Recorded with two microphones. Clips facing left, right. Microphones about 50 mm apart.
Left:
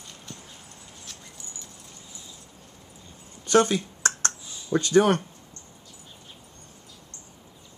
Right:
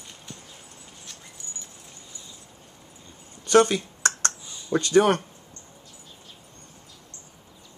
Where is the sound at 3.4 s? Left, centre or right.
Right.